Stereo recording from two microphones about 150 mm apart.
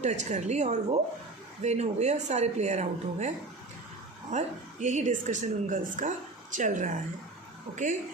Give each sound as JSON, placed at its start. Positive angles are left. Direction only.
{"t": 0.0, "sound": "a woman's voice", "side_deg": -50}